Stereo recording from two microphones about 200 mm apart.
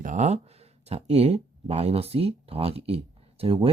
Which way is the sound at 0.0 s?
35° right (ahead or behind).